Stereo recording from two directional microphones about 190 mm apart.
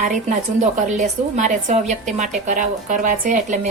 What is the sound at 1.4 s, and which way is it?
A woman's voice, 35° right (ahead or behind).